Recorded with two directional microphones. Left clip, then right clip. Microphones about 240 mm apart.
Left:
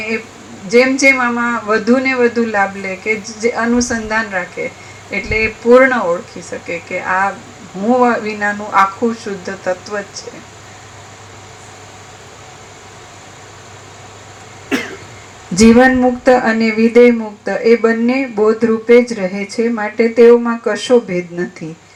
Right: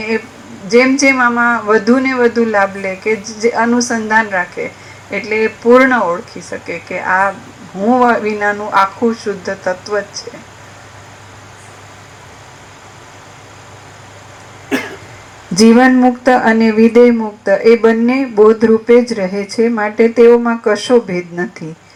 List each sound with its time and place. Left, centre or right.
0.7 s speech: right
15.5 s speech: right